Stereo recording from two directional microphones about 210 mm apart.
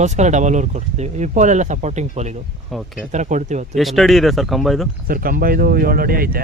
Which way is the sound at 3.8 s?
Centre (ahead or behind).